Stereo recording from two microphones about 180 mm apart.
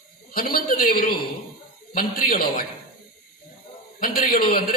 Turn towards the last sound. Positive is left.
turn(degrees=55)  # may be behind; listen again after turning